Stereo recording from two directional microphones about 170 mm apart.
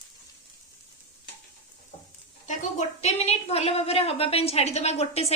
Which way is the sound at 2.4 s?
40° left (ahead or behind).